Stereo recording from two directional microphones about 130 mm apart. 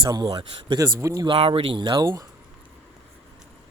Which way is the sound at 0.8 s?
25° right (ahead or behind).